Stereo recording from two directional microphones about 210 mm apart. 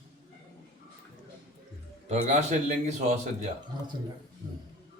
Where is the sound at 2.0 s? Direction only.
30° right (ahead or behind).